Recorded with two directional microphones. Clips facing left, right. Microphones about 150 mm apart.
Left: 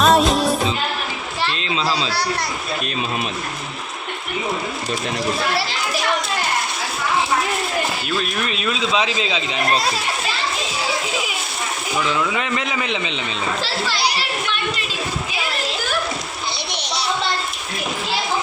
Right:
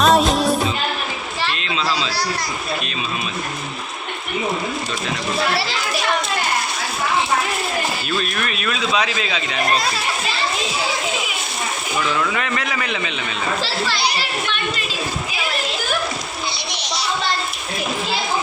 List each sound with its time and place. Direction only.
0.0 s music: centre (ahead or behind)
1.7 s a man's voice: 30° left (ahead or behind)
8.2 s a man's voice: 20° left (ahead or behind)
11.9 s a man's voice: 10° left (ahead or behind)